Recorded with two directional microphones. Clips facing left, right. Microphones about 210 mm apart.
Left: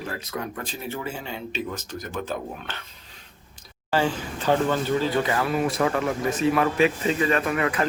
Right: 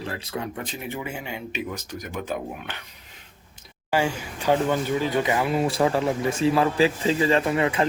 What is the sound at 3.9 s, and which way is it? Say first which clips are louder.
Speech: even; 10° right (ahead or behind).